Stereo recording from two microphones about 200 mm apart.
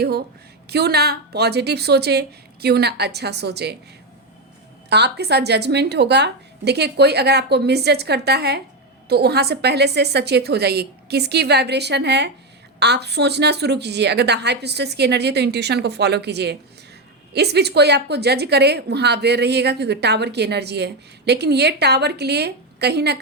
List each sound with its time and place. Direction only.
0.0 s a woman's voice: 55° right (ahead or behind)
4.9 s a woman's voice: 55° right (ahead or behind)